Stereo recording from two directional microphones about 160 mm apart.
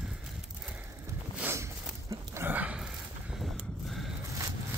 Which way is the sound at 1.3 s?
15° right (ahead or behind).